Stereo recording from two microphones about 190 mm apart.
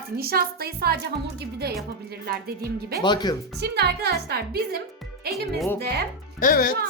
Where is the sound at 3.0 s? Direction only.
20° left (ahead or behind).